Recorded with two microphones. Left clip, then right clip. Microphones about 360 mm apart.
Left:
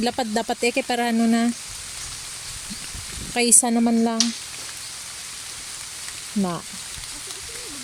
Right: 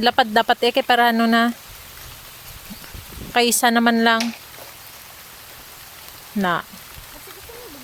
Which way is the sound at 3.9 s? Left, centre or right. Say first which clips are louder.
Right 5 dB; right.